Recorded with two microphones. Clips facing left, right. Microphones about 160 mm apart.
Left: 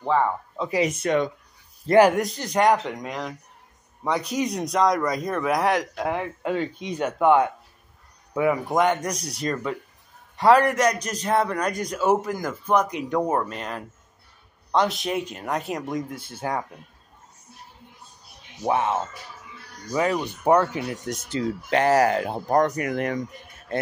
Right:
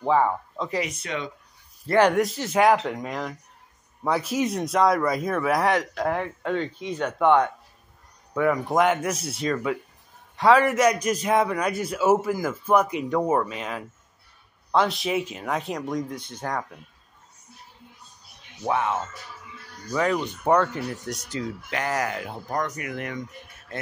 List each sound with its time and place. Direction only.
0.0 s speech: 15° right (ahead or behind)
0.6 s speech: 10° left (ahead or behind)
0.8 s speech: 50° left (ahead or behind)
1.9 s speech: 10° left (ahead or behind)
2.1 s a man's voice: centre (ahead or behind)
8.6 s a man's voice: centre (ahead or behind)
18.6 s speech: 20° left (ahead or behind)
21.3 s speech: 30° left (ahead or behind)